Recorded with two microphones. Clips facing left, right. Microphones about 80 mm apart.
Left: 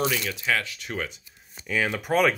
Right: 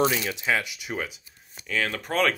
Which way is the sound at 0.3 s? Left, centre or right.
Centre.